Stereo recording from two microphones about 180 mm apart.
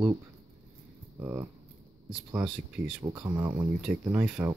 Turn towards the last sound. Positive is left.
turn(degrees=-5)  # may be behind; listen again after turning